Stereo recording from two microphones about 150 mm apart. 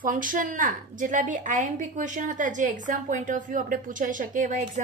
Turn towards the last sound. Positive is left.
turn(degrees=-55)  # may be behind; listen again after turning